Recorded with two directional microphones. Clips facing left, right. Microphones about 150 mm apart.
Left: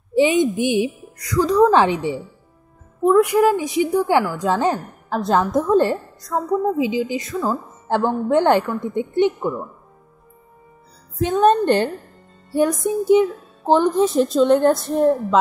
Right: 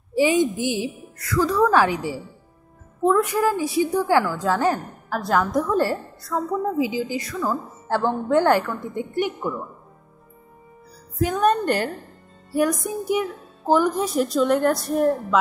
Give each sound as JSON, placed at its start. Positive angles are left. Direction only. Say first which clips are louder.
{"t": 0.1, "sound": "a woman's voice", "louder": "left 3 dB", "side_deg": 20}
{"t": 3.1, "sound": "a woman's voice", "louder": "left 5 dB", "side_deg": 15}
{"t": 11.1, "sound": "a woman's voice", "louder": "left 4 dB", "side_deg": 25}